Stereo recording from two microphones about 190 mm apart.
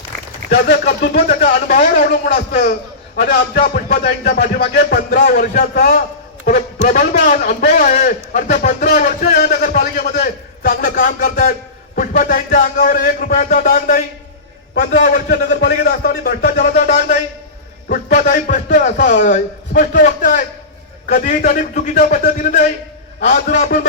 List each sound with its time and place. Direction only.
1.3 s a man's voice: 40° left (ahead or behind)